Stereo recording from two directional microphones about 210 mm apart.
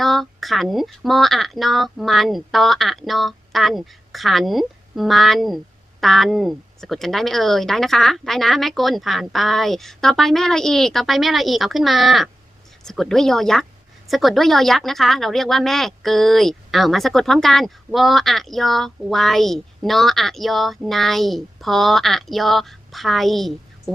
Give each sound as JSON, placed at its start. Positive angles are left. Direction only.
{"t": 0.0, "sound": "speech", "side_deg": 0}